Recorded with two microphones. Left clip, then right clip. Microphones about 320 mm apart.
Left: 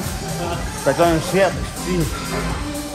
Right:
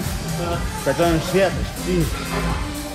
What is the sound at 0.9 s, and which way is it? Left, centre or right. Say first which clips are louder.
Speech: left 2 dB; centre.